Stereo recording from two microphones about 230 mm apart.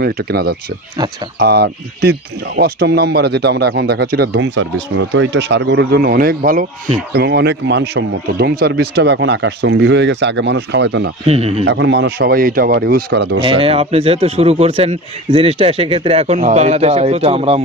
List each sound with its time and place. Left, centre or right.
0.0 s speech: right
11.2 s a man's voice: right
11.6 s speech: right
13.4 s a man's voice: right